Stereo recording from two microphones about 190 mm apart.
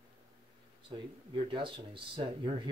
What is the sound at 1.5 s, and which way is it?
Speech, 25° right (ahead or behind).